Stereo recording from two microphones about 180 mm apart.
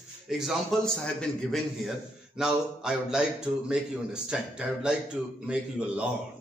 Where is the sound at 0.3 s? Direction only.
Centre (ahead or behind).